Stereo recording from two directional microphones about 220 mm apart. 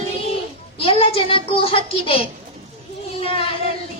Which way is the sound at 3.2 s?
25° left (ahead or behind).